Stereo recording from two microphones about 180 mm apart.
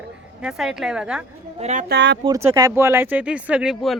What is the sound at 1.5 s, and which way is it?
Speech, 40° right (ahead or behind).